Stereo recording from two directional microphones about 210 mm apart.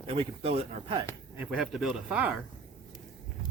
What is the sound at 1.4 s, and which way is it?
Speech, 5° right (ahead or behind).